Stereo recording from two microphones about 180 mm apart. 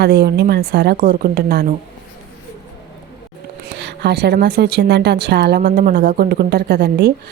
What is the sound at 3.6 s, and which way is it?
A woman's voice, 70° right (ahead or behind).